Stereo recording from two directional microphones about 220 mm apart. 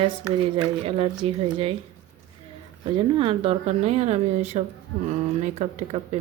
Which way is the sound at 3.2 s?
25° right (ahead or behind).